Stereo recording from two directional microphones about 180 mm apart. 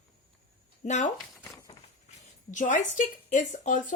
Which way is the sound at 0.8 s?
40° left (ahead or behind).